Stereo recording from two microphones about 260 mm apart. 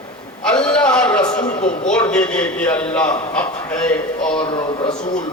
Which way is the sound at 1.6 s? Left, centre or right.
Left.